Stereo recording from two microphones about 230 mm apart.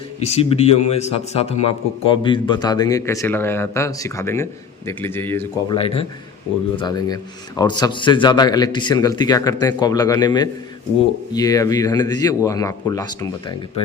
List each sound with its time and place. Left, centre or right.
0.2 s a man's voice: left